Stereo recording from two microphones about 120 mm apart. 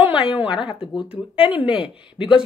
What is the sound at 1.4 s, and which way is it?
Speech, 15° right (ahead or behind).